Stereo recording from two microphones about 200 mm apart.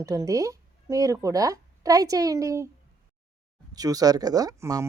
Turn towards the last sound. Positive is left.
turn(degrees=-15)  # may be behind; listen again after turning